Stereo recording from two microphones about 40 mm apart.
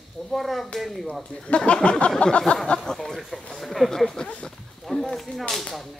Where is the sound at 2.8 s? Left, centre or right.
Centre.